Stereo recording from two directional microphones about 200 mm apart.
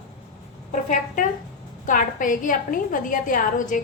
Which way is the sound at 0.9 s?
40° left (ahead or behind).